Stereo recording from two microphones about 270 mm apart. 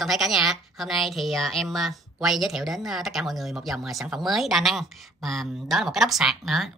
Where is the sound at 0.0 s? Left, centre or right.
Centre.